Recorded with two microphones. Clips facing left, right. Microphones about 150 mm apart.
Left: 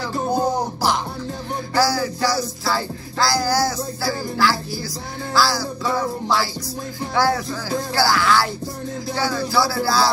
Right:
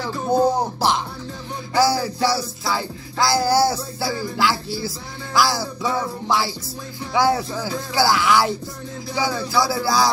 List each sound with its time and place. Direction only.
0.3 s music: 25° right (ahead or behind)